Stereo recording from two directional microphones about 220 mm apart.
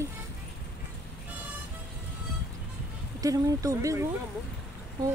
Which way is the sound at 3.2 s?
15° right (ahead or behind).